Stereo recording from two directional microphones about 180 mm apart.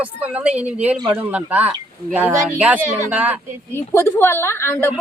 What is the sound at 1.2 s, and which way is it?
Speech, 10° right (ahead or behind).